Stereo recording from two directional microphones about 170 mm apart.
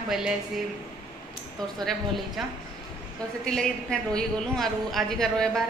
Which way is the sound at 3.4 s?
5° left (ahead or behind).